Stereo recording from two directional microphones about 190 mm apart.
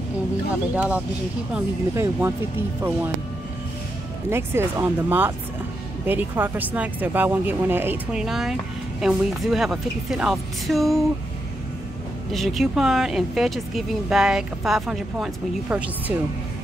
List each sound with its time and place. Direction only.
0.7 s speech: 5° right (ahead or behind)
4.3 s speech: 15° right (ahead or behind)
12.3 s speech: centre (ahead or behind)